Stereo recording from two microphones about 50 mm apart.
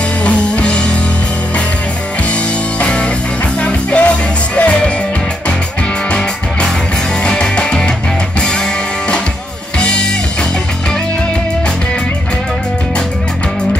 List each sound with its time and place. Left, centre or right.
0.2 s music: left
2.8 s music: left
7.2 s music: centre
9.8 s music: centre